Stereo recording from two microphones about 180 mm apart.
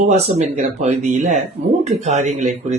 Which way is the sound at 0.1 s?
40° right (ahead or behind).